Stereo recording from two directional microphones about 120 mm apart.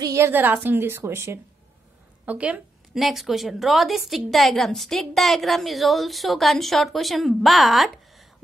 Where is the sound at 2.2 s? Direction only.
10° right (ahead or behind).